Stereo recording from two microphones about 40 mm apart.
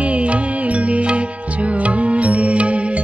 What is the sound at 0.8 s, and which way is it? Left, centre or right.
Music, right.